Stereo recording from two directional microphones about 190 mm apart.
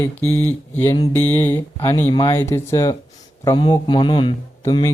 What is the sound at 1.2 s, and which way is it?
Speech, 15° left (ahead or behind).